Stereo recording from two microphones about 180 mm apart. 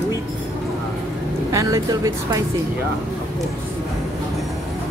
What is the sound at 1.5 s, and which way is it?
Speech, 20° right (ahead or behind).